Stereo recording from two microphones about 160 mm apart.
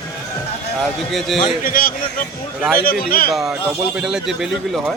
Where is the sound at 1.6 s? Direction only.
60° left (ahead or behind).